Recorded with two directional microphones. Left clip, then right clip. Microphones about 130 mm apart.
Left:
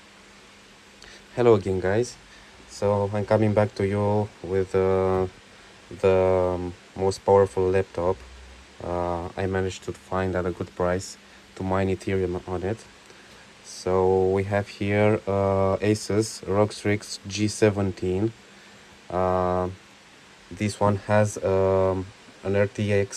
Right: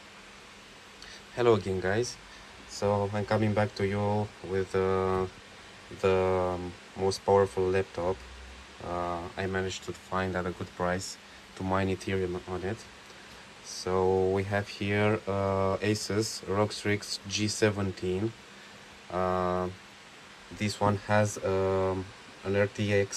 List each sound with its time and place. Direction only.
1.3 s speech: 15° right (ahead or behind)
11.5 s speech: 15° right (ahead or behind)